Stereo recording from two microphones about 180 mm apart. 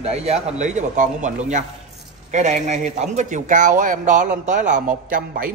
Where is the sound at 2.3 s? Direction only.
40° right (ahead or behind).